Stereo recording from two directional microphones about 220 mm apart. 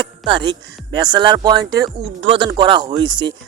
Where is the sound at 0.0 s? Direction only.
20° right (ahead or behind).